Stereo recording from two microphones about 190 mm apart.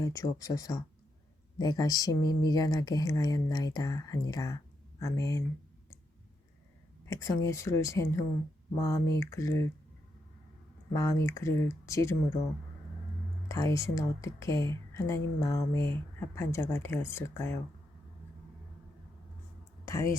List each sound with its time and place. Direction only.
0.0 s speech: 15° left (ahead or behind)
7.1 s speech: 15° left (ahead or behind)
10.9 s speech: 15° left (ahead or behind)
13.5 s speech: 15° left (ahead or behind)
19.8 s a sound: 15° left (ahead or behind)